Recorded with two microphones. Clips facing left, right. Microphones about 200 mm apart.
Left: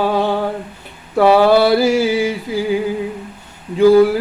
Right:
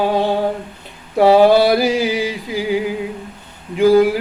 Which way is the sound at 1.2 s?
20° right (ahead or behind).